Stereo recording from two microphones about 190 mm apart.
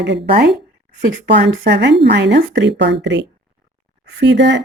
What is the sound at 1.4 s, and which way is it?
A woman's voice, 65° right (ahead or behind).